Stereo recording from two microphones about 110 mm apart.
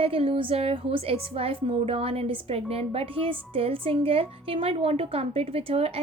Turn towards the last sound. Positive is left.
turn(degrees=-65)  # may be behind; listen again after turning